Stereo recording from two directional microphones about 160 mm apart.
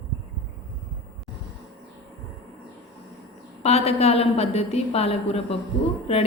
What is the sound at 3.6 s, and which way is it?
A woman's voice, 40° left (ahead or behind).